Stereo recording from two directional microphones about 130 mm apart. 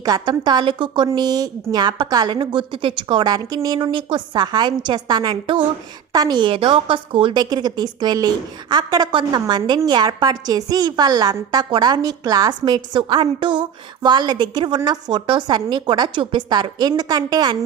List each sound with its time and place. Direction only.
0.0 s a woman's voice: 30° right (ahead or behind)